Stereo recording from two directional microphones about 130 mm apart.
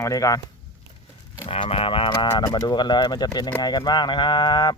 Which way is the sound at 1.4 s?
50° left (ahead or behind).